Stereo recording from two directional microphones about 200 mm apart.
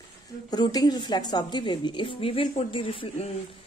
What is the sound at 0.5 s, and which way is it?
Speech, 20° left (ahead or behind).